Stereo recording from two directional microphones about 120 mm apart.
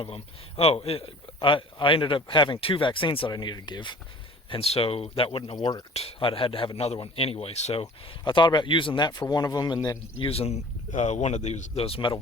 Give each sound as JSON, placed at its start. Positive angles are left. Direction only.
{"t": 0.0, "sound": "speech", "side_deg": 55}
{"t": 4.4, "sound": "speech", "side_deg": 50}
{"t": 7.8, "sound": "speech", "side_deg": 45}
{"t": 10.2, "sound": "speech", "side_deg": 55}